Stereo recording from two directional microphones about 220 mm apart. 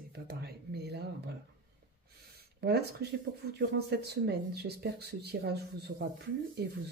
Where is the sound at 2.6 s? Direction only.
45° right (ahead or behind).